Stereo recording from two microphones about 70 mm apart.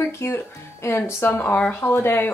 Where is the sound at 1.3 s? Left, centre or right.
Left.